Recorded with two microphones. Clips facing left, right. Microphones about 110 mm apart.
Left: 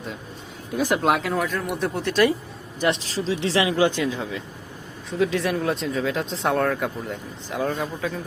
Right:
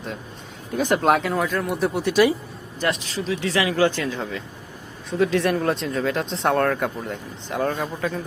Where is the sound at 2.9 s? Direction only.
30° left (ahead or behind); by 4.1 s 15° left (ahead or behind).